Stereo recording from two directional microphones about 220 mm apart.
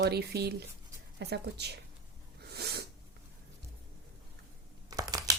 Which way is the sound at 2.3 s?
45° right (ahead or behind).